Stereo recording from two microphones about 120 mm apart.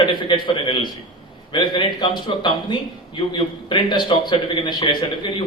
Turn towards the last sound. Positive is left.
turn(degrees=40)  # may be behind; listen again after turning